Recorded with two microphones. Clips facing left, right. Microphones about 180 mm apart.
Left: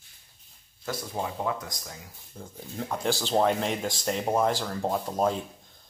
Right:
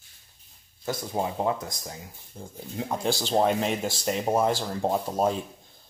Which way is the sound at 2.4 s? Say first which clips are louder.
Right 2 dB; 15° right (ahead or behind).